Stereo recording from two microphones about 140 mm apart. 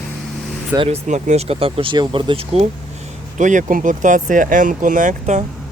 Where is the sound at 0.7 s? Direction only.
50° right (ahead or behind).